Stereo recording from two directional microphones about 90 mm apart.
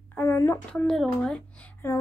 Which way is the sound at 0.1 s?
25° left (ahead or behind).